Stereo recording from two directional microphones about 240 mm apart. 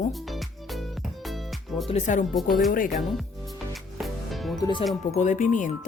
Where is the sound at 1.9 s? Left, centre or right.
Left.